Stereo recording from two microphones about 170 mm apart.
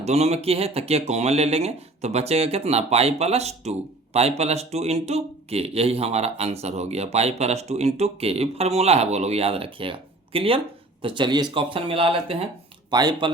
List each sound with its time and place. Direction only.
0.0 s speech: 40° right (ahead or behind)